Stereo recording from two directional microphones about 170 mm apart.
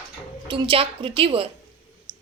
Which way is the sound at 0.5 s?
30° right (ahead or behind).